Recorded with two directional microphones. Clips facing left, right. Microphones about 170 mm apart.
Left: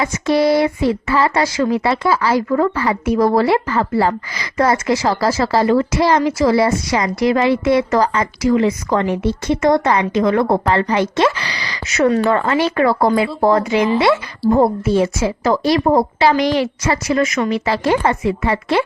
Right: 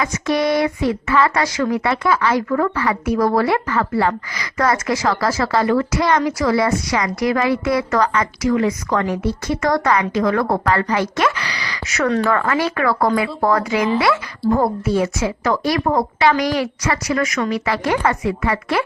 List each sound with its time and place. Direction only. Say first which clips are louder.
0.0 s speech: left 4 dB; 30° left (ahead or behind)